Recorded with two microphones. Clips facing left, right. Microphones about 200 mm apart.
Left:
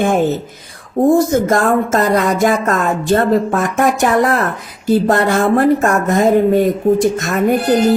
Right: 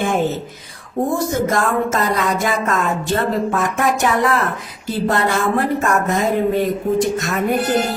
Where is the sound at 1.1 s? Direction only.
45° left (ahead or behind).